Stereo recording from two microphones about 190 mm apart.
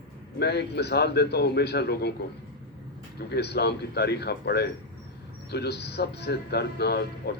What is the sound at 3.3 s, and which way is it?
A man's voice, 60° left (ahead or behind).